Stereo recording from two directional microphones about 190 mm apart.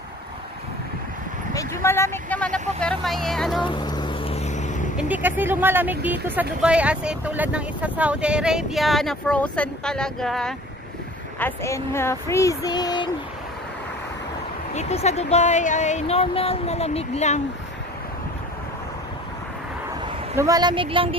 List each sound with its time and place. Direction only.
1.5 s speech: 15° left (ahead or behind); by 3.6 s centre (ahead or behind)
3.6 s a sound: 25° left (ahead or behind); by 4.8 s 40° left (ahead or behind)
4.9 s speech: 10° right (ahead or behind); by 13.1 s 20° left (ahead or behind)
14.7 s speech: 35° left (ahead or behind)
20.3 s speech: 20° right (ahead or behind)